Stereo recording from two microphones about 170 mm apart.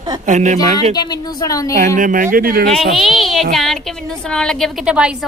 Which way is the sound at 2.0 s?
50° right (ahead or behind).